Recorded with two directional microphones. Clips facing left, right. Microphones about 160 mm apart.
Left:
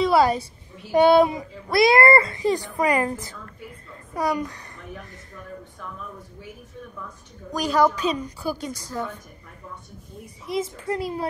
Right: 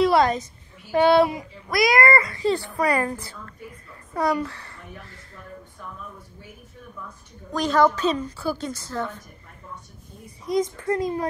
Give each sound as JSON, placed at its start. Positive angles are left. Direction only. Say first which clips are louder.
{"t": 0.0, "sound": "a woman's voice", "louder": "even", "side_deg": 5}
{"t": 1.3, "sound": "speech", "louder": "left 3 dB", "side_deg": 30}
{"t": 2.3, "sound": "a woman's voice", "louder": "even", "side_deg": 15}
{"t": 7.5, "sound": "a woman's voice", "louder": "right 1 dB", "side_deg": 10}
{"t": 10.4, "sound": "a woman's voice", "louder": "right 4 dB", "side_deg": 5}